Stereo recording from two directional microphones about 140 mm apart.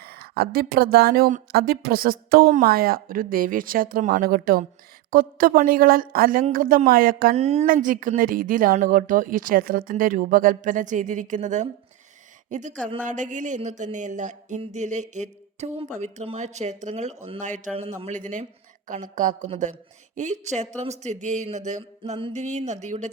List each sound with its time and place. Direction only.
0.0 s speech: 90° right
7.3 s speech: 50° right (ahead or behind)
7.7 s speech: 75° right (ahead or behind); by 23.1 s 60° right (ahead or behind)